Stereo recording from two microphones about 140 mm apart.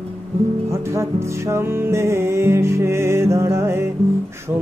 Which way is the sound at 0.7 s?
20° right (ahead or behind).